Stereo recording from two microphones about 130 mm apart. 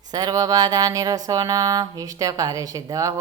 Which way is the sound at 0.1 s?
30° right (ahead or behind).